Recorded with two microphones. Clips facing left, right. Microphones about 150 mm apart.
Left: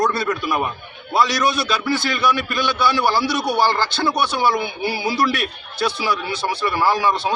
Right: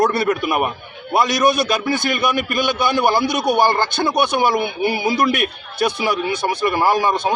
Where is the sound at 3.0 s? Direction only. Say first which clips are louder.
Right 2 dB; 20° right (ahead or behind).